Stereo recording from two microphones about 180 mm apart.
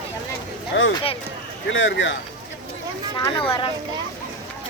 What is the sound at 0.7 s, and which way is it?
Speech, 90° left.